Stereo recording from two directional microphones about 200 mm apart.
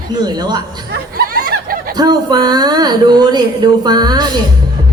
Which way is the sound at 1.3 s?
45° right (ahead or behind).